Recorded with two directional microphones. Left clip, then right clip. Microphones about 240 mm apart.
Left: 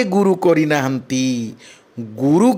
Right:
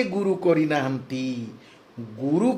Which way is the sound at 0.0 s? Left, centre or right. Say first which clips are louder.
Left 8 dB; left.